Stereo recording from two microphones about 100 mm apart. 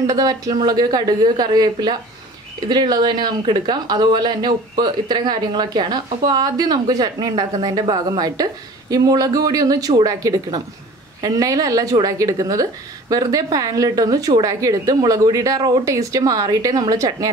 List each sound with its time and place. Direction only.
0.0 s a woman's voice: 40° right (ahead or behind)